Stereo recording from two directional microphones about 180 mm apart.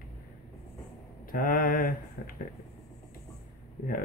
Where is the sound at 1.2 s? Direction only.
50° left (ahead or behind).